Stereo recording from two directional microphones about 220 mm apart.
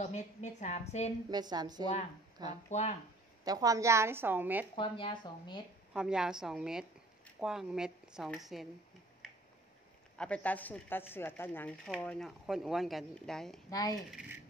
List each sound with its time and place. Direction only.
0.0 s a woman's voice: 30° left (ahead or behind)
1.3 s a woman's voice: 20° right (ahead or behind)
2.7 s a woman's voice: 30° left (ahead or behind)
3.4 s a woman's voice: 15° right (ahead or behind)
4.7 s speech: 20° left (ahead or behind)
5.9 s speech: 5° right (ahead or behind)
10.1 s speech: 5° left (ahead or behind)
13.7 s speech: 15° left (ahead or behind)